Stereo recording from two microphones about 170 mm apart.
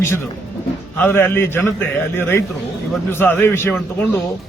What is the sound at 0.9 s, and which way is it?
Speech, 10° left (ahead or behind).